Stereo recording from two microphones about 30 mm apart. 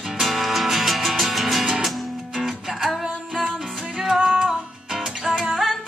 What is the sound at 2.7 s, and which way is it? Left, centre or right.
Music, centre.